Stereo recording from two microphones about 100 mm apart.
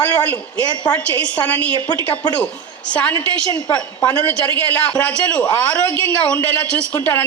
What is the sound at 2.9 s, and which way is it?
A man's voice, 15° left (ahead or behind).